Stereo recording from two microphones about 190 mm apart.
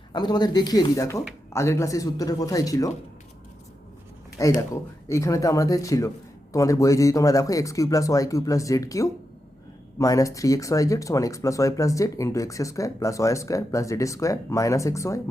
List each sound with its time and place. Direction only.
0.1 s speech: 20° left (ahead or behind)
4.7 s speech: 15° left (ahead or behind)